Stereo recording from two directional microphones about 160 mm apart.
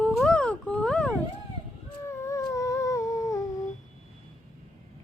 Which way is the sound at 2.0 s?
20° left (ahead or behind).